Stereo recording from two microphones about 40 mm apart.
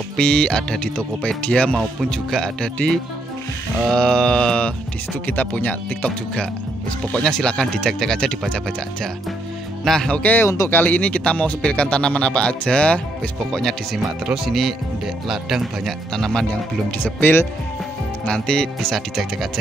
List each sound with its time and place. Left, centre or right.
0.2 s speech: centre
2.0 s speech: centre
5.2 s speech: left
7.2 s speech: centre
9.8 s speech: centre
10.3 s speech: left
10.8 s speech: left
13.5 s speech: centre
14.2 s speech: centre
14.5 s speech: centre
16.1 s speech: centre
17.0 s speech: left
18.2 s speech: left
18.8 s speech: centre